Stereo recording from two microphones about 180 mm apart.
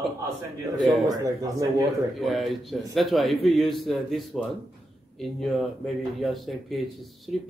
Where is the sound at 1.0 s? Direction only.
20° right (ahead or behind).